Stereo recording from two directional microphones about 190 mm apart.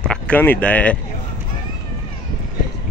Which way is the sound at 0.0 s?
5° left (ahead or behind).